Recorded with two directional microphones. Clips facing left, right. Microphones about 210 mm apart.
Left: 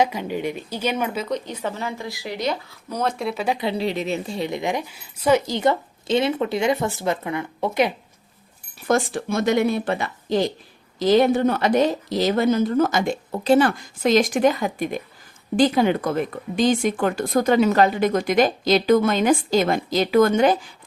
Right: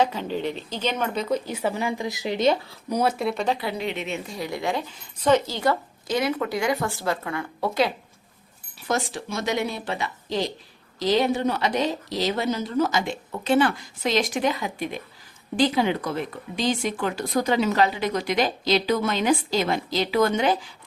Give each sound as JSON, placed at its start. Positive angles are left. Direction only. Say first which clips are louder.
{"t": 0.0, "sound": "speech", "louder": "left 2 dB", "side_deg": 10}
{"t": 1.3, "sound": "speech", "louder": "right 2 dB", "side_deg": -10}
{"t": 2.9, "sound": "speech", "louder": "right 1 dB", "side_deg": -5}
{"t": 3.6, "sound": "a woman's voice", "louder": "left 5 dB", "side_deg": 30}
{"t": 5.5, "sound": "a woman's voice", "louder": "left 3 dB", "side_deg": 25}
{"t": 8.9, "sound": "a woman's voice", "louder": "left 6 dB", "side_deg": 55}
{"t": 13.3, "sound": "a woman's voice", "louder": "left 3 dB", "side_deg": 35}